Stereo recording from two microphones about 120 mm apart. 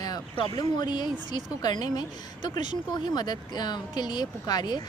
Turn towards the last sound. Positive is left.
turn(degrees=35)  # may be behind; listen again after turning